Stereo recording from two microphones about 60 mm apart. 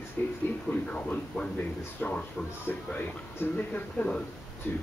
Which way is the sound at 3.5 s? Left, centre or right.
Left.